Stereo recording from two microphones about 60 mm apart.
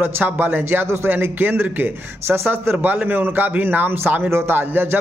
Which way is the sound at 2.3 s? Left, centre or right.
Right.